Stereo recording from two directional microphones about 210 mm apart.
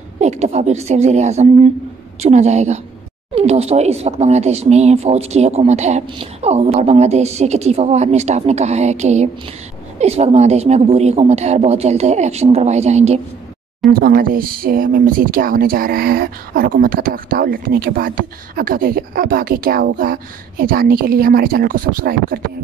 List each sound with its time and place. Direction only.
0.2 s a woman's voice: 30° right (ahead or behind)
13.9 s speech: 45° right (ahead or behind)